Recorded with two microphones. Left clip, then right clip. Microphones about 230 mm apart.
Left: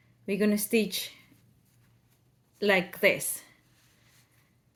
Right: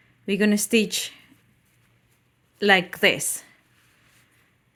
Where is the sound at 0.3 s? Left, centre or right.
Right.